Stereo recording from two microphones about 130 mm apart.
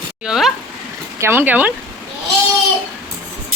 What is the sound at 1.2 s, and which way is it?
Speech, 20° right (ahead or behind).